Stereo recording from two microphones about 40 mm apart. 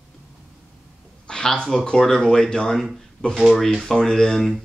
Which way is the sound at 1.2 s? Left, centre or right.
Centre.